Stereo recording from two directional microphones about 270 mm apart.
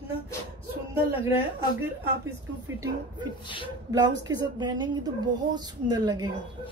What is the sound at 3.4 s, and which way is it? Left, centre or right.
Speech, centre.